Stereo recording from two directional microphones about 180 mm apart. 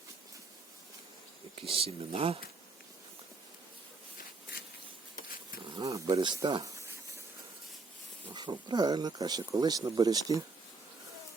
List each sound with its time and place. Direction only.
1.6 s speech: 30° right (ahead or behind)
5.7 s speech: 20° right (ahead or behind)
8.3 s speech: 25° right (ahead or behind)